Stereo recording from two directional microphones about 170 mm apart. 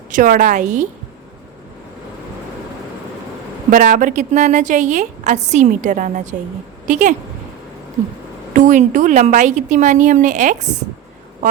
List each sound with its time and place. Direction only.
0.1 s a woman's voice: 50° right (ahead or behind)
3.7 s a woman's voice: 50° right (ahead or behind)
8.5 s a woman's voice: 45° right (ahead or behind)